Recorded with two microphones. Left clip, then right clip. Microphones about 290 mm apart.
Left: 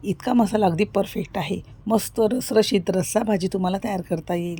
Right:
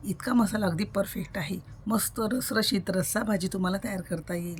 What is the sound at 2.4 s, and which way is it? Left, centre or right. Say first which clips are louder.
Speech: left 8 dB; centre.